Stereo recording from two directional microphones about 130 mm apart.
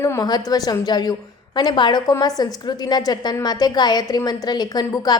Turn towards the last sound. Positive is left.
turn(degrees=30)  # may be behind; listen again after turning